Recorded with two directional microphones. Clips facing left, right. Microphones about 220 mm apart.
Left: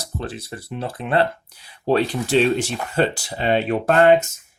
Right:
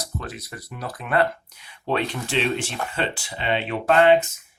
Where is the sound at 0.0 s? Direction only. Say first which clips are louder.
Left 3 dB; 30° left (ahead or behind).